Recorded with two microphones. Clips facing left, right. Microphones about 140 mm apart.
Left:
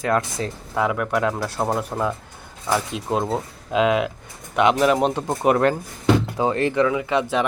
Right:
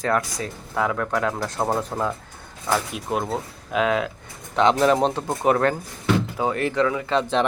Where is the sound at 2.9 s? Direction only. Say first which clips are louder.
Left 3 dB; 25° left (ahead or behind).